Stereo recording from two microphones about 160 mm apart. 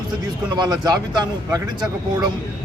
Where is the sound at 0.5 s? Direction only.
25° right (ahead or behind).